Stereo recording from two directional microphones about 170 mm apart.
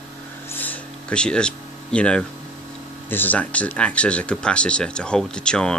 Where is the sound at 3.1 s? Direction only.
10° left (ahead or behind).